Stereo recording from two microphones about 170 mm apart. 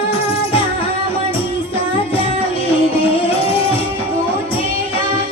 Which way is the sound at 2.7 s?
35° left (ahead or behind).